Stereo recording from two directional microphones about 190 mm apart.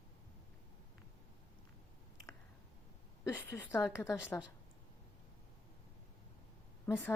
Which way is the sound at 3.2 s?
15° left (ahead or behind).